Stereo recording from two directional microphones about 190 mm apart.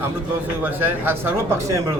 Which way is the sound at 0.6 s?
10° right (ahead or behind).